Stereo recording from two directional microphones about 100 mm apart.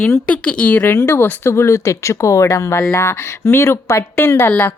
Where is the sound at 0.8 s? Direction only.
25° left (ahead or behind).